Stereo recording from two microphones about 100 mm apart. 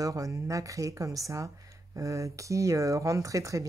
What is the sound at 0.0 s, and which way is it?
Speech, 35° right (ahead or behind).